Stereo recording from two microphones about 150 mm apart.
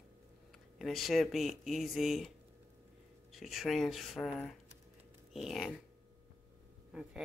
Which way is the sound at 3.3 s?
Centre (ahead or behind).